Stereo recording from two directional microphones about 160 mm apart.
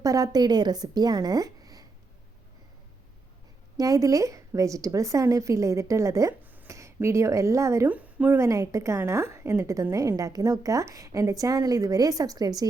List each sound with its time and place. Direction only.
0.0 s a woman's voice: 20° right (ahead or behind)
3.8 s a woman's voice: 20° right (ahead or behind)